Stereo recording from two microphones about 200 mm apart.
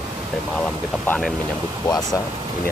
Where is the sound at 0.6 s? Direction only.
5° left (ahead or behind).